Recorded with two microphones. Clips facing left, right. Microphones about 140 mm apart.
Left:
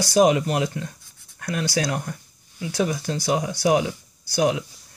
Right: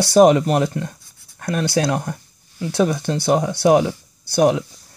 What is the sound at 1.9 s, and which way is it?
Speech, 45° right (ahead or behind).